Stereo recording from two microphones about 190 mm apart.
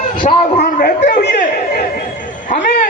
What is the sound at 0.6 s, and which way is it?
Chatter, 50° left (ahead or behind).